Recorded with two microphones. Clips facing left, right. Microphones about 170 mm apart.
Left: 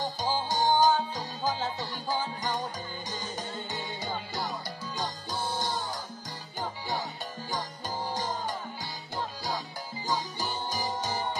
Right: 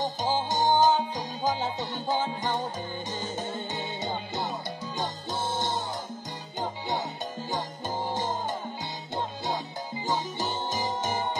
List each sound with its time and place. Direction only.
0.0 s music: 20° right (ahead or behind)
8.1 s music: 25° right (ahead or behind)
10.0 s music: 20° right (ahead or behind)